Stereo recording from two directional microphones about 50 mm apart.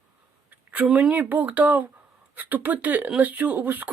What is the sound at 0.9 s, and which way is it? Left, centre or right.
Speech, centre.